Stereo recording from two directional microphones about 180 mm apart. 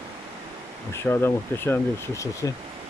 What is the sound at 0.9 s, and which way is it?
Speech, 15° left (ahead or behind).